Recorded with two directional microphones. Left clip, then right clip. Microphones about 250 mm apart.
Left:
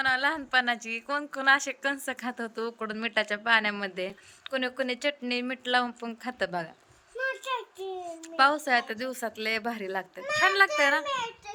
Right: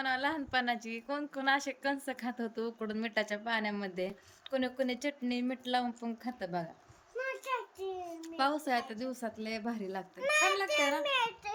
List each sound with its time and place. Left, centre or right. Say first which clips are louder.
0.0 s a woman's voice: left 7 dB; centre
7.2 s a sound: left 5 dB; left
8.2 s a woman's voice: left 9 dB; centre